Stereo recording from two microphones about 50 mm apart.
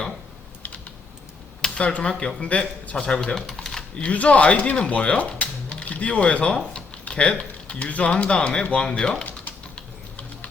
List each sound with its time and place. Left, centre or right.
1.6 s a man's voice: left
3.3 s typewriter: centre
4.0 s speech: left